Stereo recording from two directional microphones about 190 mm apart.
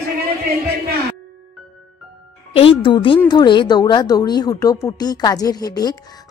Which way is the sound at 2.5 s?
30° left (ahead or behind).